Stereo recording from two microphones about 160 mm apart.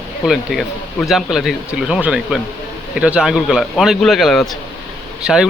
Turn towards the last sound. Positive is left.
turn(degrees=-5)  # may be behind; listen again after turning